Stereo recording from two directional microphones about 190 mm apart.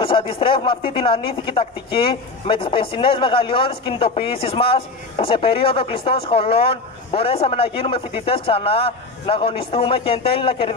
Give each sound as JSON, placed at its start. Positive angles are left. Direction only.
{"t": 0.0, "sound": "speech", "side_deg": 25}